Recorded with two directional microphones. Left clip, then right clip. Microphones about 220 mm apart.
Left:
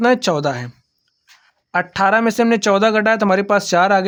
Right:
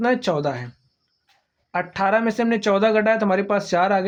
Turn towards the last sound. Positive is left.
turn(degrees=40)  # may be behind; listen again after turning